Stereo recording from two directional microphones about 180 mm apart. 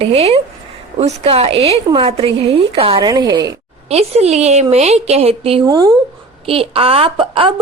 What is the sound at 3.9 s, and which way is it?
A woman's voice, 35° right (ahead or behind).